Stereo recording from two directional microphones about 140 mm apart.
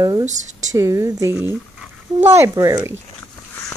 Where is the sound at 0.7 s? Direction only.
20° right (ahead or behind).